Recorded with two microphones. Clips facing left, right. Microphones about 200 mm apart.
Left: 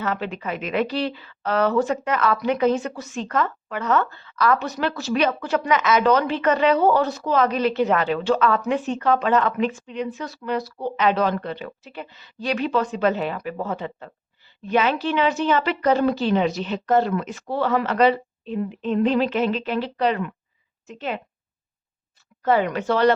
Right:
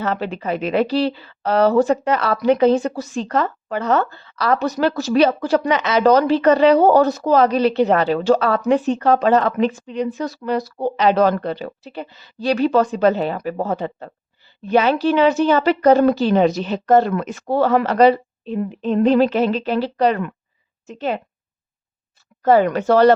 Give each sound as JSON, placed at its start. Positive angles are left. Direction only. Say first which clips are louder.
{"t": 0.0, "sound": "a woman's voice", "louder": "right 4 dB", "side_deg": -35}
{"t": 22.4, "sound": "speech", "louder": "right 6 dB", "side_deg": -40}